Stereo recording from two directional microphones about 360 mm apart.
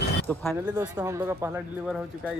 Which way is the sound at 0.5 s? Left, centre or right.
Centre.